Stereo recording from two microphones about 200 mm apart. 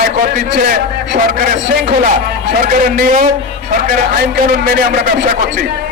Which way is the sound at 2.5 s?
50° right (ahead or behind).